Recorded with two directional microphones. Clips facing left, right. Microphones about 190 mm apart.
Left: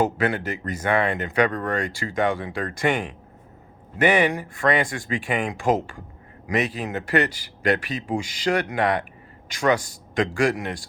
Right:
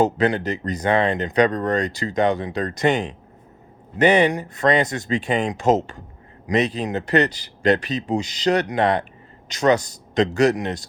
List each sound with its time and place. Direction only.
0.0 s speech: 20° right (ahead or behind)